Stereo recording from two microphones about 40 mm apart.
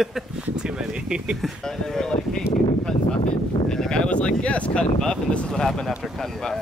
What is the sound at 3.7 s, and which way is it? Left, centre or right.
Speech, centre.